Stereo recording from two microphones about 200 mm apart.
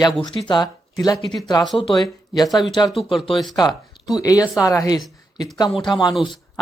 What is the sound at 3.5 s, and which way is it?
A woman's voice, 20° left (ahead or behind).